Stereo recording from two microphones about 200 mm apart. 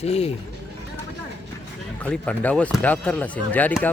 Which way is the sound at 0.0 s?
30° left (ahead or behind).